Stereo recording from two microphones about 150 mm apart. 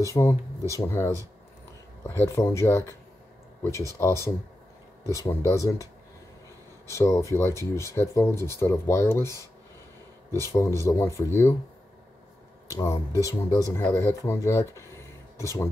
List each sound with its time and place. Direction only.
0.0 s speech: 20° left (ahead or behind)
6.9 s speech: 20° left (ahead or behind)
10.3 s speech: 20° left (ahead or behind)
12.6 s speech: 20° left (ahead or behind)